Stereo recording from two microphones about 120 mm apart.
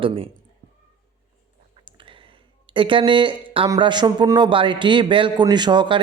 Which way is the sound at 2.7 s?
45° right (ahead or behind).